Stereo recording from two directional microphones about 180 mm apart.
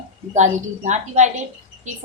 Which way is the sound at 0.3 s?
40° right (ahead or behind).